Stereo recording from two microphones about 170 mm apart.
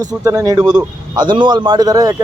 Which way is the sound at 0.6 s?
5° right (ahead or behind).